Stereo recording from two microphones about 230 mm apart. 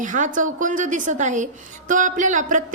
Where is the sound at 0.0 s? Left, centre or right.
Right.